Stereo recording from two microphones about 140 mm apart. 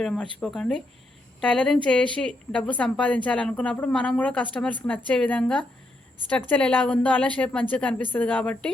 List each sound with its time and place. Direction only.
0.0 s a woman's voice: 5° left (ahead or behind)